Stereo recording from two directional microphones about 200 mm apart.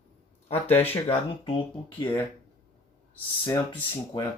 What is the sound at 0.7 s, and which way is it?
Speech, 10° left (ahead or behind).